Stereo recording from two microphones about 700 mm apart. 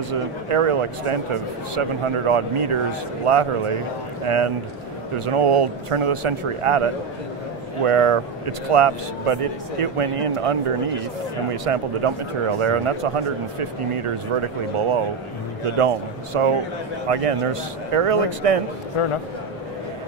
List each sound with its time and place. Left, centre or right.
0.1 s speech: right
16.3 s speech: right
19.0 s a man's voice: left